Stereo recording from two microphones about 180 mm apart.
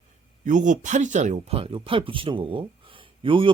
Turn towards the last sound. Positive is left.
turn(degrees=-30)  # may be behind; listen again after turning